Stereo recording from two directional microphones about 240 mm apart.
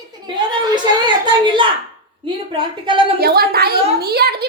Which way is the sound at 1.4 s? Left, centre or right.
Centre.